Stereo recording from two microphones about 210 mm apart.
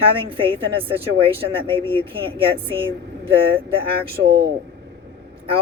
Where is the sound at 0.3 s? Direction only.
25° right (ahead or behind).